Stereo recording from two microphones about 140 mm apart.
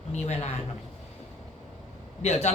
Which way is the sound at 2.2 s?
50° left (ahead or behind).